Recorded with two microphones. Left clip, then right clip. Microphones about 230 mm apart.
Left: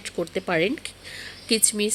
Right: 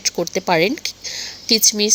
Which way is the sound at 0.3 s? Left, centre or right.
Centre.